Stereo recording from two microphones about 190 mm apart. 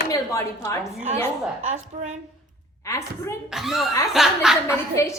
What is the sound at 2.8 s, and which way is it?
Speech, 15° left (ahead or behind).